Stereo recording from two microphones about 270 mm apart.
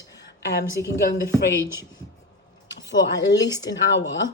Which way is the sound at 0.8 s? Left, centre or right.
Left.